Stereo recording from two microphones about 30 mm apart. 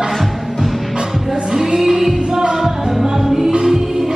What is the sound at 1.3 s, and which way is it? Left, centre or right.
Music, centre.